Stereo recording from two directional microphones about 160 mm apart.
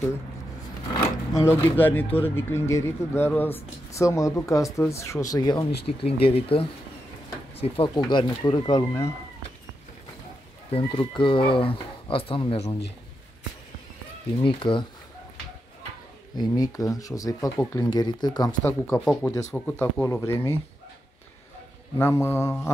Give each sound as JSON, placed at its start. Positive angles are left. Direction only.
{"t": 1.4, "sound": "speech", "side_deg": 15}
{"t": 5.9, "sound": "speech", "side_deg": 35}
{"t": 10.7, "sound": "speech", "side_deg": 35}
{"t": 14.4, "sound": "speech", "side_deg": 30}
{"t": 16.3, "sound": "speech", "side_deg": 25}
{"t": 18.6, "sound": "speech", "side_deg": 15}
{"t": 18.9, "sound": "speech", "side_deg": 5}
{"t": 21.9, "sound": "speech", "side_deg": 15}